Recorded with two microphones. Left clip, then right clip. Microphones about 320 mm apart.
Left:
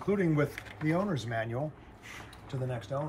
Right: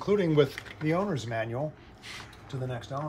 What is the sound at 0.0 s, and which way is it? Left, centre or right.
Speech, right.